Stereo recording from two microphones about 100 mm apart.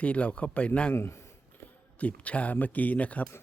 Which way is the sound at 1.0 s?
25° left (ahead or behind).